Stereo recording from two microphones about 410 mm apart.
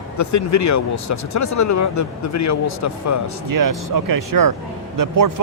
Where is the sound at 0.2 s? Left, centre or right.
Left.